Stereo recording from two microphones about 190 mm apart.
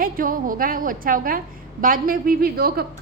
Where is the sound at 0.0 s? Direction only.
45° right (ahead or behind).